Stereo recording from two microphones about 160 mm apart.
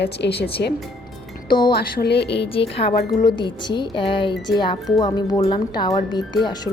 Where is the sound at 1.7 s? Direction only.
75° left (ahead or behind).